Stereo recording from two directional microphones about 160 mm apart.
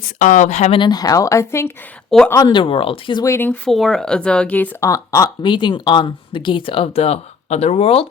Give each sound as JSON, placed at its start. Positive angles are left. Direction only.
{"t": 0.2, "sound": "speech", "side_deg": 50}
{"t": 0.8, "sound": "speech", "side_deg": 25}
{"t": 2.0, "sound": "a woman's voice", "side_deg": 5}
{"t": 2.3, "sound": "speech", "side_deg": 25}
{"t": 3.2, "sound": "speech", "side_deg": 15}
{"t": 3.7, "sound": "speech", "side_deg": 0}